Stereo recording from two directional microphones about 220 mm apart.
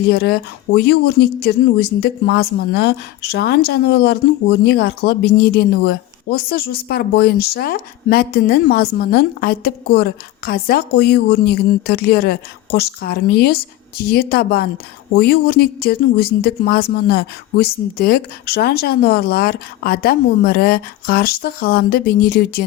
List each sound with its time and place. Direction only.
0.1 s speech: 45° left (ahead or behind)